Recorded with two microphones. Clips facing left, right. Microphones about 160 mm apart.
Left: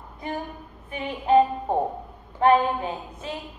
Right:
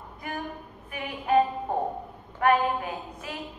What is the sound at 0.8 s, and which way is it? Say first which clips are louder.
Speech: left 4 dB; 25° left (ahead or behind).